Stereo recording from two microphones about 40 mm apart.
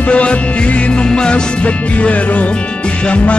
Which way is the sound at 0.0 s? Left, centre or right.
Left.